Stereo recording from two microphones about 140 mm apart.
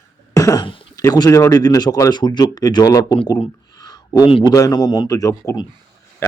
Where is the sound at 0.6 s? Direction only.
35° left (ahead or behind).